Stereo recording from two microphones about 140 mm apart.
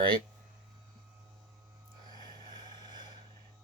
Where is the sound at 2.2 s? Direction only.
30° right (ahead or behind).